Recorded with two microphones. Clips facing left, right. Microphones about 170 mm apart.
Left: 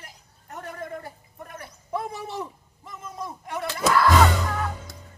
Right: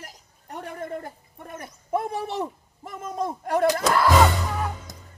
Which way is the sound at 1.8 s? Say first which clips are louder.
Right 5 dB; 55° right (ahead or behind).